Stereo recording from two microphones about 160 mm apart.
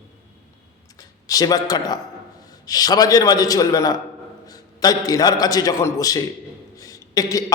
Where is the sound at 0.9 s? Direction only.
25° left (ahead or behind).